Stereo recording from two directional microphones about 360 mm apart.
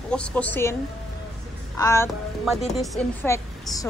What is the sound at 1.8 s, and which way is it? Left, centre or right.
A woman's voice, centre.